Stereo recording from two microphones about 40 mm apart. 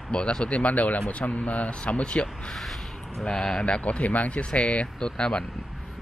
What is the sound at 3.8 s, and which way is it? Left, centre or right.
Speech, left.